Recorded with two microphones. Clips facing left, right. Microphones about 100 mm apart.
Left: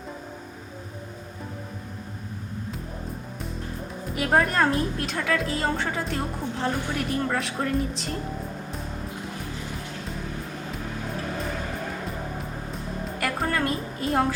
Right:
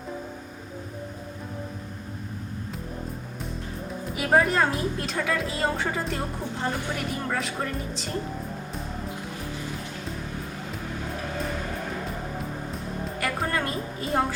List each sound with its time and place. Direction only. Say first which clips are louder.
4.0 s a woman's voice: right 1 dB; centre (ahead or behind)
12.7 s music: even; centre (ahead or behind)